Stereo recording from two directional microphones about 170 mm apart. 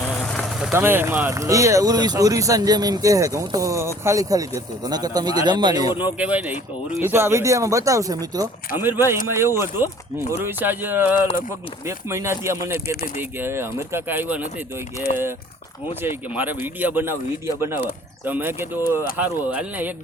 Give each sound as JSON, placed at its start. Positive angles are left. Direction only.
{"t": 0.6, "sound": "speech", "side_deg": -10}
{"t": 6.1, "sound": "speech", "side_deg": -10}
{"t": 12.7, "sound": "speech", "side_deg": 65}
{"t": 13.1, "sound": "speech", "side_deg": -15}
{"t": 16.0, "sound": "speech", "side_deg": -10}